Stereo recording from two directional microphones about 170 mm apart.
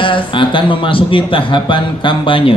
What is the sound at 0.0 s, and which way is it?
A man's voice, 30° left (ahead or behind).